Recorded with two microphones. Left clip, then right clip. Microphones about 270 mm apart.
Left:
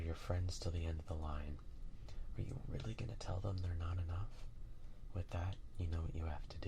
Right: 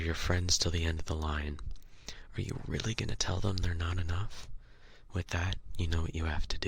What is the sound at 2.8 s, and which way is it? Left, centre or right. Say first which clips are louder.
Speech: right 19 dB; right.